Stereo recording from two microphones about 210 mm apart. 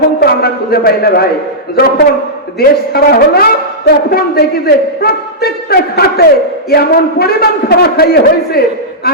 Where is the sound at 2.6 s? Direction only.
45° left (ahead or behind).